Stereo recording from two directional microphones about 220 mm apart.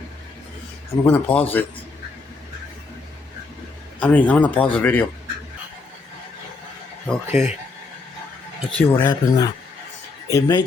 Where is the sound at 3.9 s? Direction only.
5° left (ahead or behind).